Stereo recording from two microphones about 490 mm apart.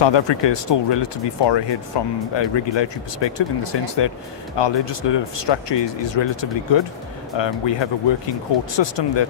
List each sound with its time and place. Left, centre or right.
0.0 s speech: left